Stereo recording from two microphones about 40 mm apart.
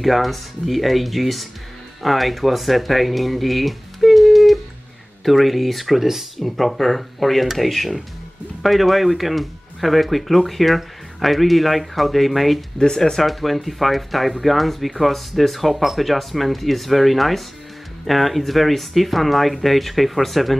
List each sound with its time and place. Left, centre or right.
0.0 s speech: centre
12.7 s speech: centre
13.2 s speech: centre